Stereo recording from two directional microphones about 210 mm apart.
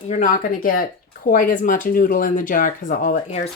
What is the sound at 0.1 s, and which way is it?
Speech, 40° left (ahead or behind).